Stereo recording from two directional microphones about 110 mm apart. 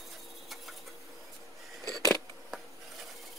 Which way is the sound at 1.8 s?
35° right (ahead or behind).